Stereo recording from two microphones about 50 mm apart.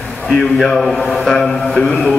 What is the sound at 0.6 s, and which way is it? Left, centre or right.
A man's voice, centre.